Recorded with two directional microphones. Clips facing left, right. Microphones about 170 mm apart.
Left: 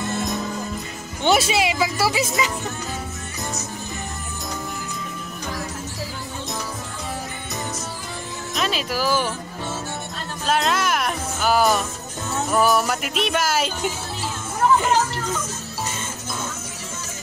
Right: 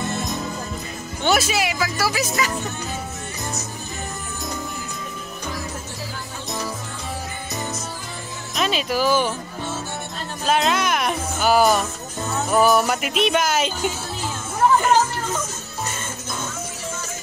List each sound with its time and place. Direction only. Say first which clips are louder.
1.2 s speech: left 2 dB; 25° left (ahead or behind)
8.5 s speech: right 3 dB; centre (ahead or behind)
10.4 s music: right 1 dB; centre (ahead or behind)